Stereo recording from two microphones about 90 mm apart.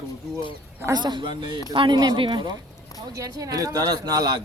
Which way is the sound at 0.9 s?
55° right (ahead or behind).